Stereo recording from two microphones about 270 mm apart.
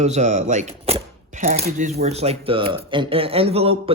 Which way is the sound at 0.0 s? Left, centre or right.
Right.